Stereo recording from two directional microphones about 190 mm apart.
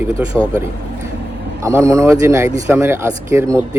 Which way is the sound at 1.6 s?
15° right (ahead or behind).